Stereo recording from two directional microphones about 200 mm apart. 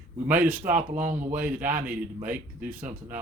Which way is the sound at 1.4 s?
10° right (ahead or behind).